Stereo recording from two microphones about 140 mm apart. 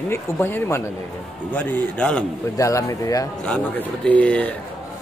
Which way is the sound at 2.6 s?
20° left (ahead or behind).